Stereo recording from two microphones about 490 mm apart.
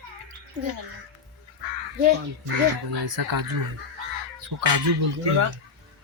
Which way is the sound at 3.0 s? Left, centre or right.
Right.